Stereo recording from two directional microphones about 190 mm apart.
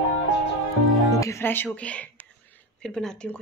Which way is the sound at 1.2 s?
15° left (ahead or behind).